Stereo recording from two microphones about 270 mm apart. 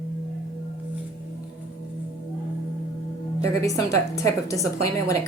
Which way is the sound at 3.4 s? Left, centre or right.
Centre.